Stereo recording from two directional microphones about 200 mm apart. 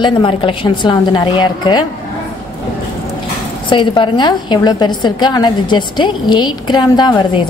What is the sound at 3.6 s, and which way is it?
A woman's voice, 25° left (ahead or behind).